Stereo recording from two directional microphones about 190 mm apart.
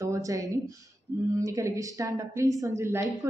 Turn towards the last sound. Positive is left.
turn(degrees=-15)  # may be behind; listen again after turning